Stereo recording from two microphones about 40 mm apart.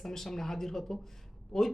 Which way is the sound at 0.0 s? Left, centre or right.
Centre.